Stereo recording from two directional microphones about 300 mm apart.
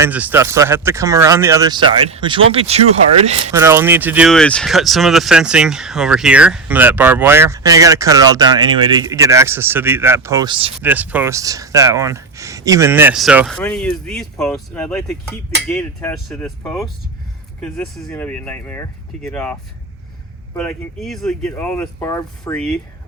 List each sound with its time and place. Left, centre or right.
0.0 s speech: centre
3.5 s speech: centre
20.6 s speech: centre